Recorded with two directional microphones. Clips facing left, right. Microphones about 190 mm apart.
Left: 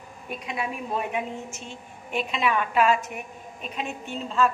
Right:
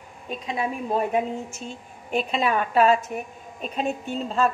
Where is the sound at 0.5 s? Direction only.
35° right (ahead or behind).